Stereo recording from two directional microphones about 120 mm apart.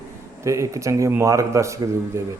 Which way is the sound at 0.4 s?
25° right (ahead or behind).